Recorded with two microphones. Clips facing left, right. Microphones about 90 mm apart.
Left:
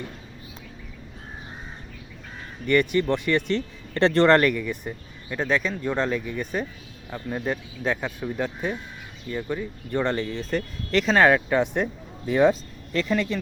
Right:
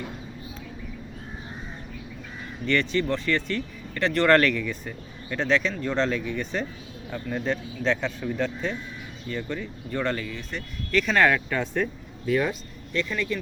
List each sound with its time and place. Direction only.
2.6 s speech: 15° left (ahead or behind)
3.9 s speech: 30° left (ahead or behind)
4.3 s speech: 15° left (ahead or behind)
10.2 s speech: 35° left (ahead or behind)
11.0 s speech: 25° left (ahead or behind)
12.2 s speech: 30° left (ahead or behind)